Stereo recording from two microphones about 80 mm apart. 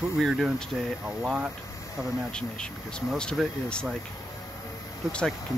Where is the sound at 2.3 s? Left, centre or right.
Centre.